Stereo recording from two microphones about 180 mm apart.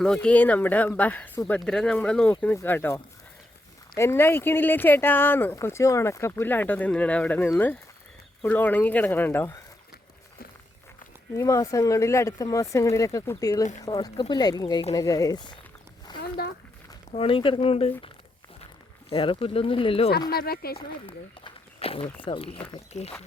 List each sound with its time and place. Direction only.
0.0 s speech: 5° left (ahead or behind)
11.3 s speech: 15° left (ahead or behind)
16.1 s a sound: 25° left (ahead or behind)
17.1 s speech: 30° left (ahead or behind)
19.1 s speech: 30° left (ahead or behind)
20.3 s speech: 60° left (ahead or behind)
20.7 s speech: 30° left (ahead or behind)